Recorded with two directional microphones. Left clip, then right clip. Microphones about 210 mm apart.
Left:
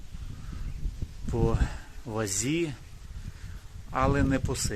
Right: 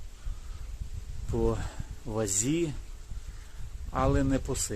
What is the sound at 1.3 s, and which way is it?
Speech, 10° left (ahead or behind).